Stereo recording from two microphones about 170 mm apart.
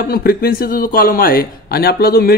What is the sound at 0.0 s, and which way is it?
Speech, 60° left (ahead or behind).